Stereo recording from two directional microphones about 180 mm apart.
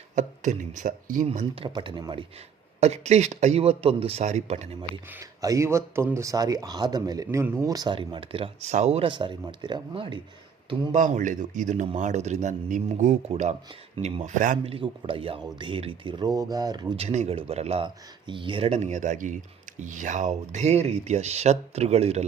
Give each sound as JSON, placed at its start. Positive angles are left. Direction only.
{"t": 0.2, "sound": "speech", "side_deg": -45}
{"t": 1.3, "sound": "speech", "side_deg": -35}
{"t": 2.8, "sound": "speech", "side_deg": -35}
{"t": 5.1, "sound": "speech", "side_deg": -20}
{"t": 10.9, "sound": "speech", "side_deg": -45}
{"t": 14.6, "sound": "speech", "side_deg": -30}
{"t": 17.0, "sound": "speech", "side_deg": -35}